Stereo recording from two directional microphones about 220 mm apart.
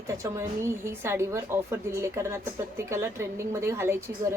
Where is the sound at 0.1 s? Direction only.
15° right (ahead or behind).